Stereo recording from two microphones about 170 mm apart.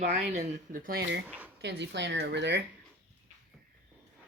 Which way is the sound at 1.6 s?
85° right.